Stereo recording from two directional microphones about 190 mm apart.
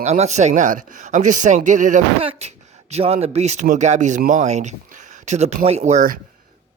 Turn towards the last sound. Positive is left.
turn(degrees=-40)  # may be behind; listen again after turning